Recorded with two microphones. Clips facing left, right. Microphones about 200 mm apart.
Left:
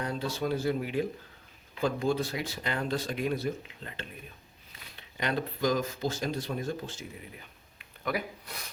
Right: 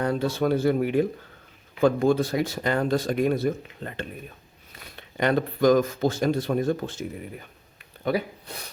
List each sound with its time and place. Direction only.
0.0 s speech: 55° right (ahead or behind)
8.0 s speech: 30° right (ahead or behind)